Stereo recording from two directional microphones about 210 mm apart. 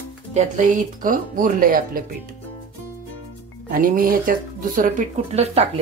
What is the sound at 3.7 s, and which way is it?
Speech, 40° right (ahead or behind).